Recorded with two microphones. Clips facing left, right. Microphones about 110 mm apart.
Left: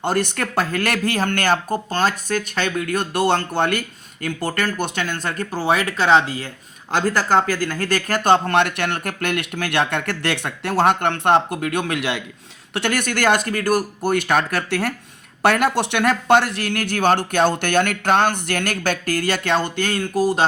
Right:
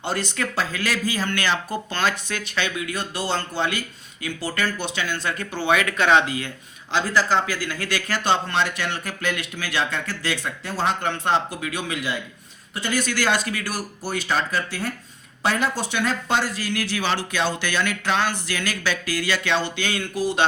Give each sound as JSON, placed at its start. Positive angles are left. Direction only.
{"t": 0.0, "sound": "speech", "side_deg": 55}
{"t": 6.9, "sound": "speech", "side_deg": 50}